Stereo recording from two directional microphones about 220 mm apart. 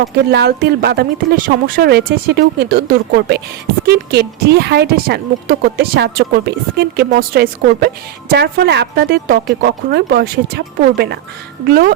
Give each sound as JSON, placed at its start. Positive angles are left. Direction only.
{"t": 0.3, "sound": "speech", "side_deg": -45}